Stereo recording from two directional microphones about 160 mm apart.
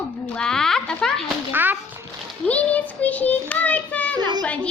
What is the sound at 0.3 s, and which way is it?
Speech, 5° left (ahead or behind).